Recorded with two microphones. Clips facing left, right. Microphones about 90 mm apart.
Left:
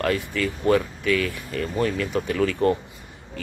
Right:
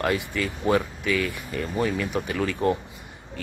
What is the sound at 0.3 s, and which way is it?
Speech, 10° right (ahead or behind).